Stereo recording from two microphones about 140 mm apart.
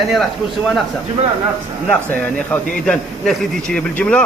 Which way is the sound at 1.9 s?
10° left (ahead or behind).